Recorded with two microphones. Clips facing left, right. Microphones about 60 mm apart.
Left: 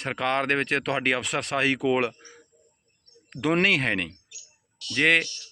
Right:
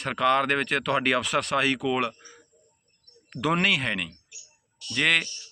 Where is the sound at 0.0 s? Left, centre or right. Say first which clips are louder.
Right 3 dB; left.